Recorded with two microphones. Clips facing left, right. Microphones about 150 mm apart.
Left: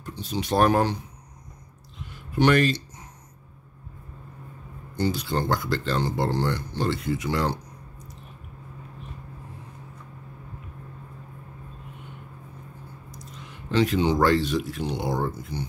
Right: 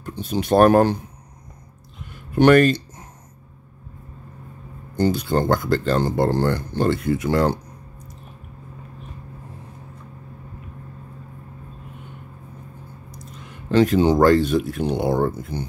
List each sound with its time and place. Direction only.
0.0 s speech: 55° right (ahead or behind)
2.3 s speech: 50° right (ahead or behind)
4.9 s speech: 50° right (ahead or behind)
13.7 s speech: 45° right (ahead or behind)